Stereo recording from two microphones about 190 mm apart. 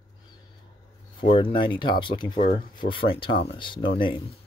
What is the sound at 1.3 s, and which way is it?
Speech, 25° left (ahead or behind).